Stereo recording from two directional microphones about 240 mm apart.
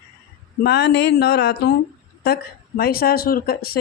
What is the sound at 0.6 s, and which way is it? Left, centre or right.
Speech, left.